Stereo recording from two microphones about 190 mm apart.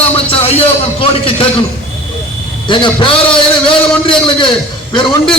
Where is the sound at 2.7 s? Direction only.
25° left (ahead or behind).